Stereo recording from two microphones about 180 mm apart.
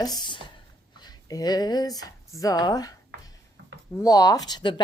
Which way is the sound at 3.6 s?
75° right (ahead or behind).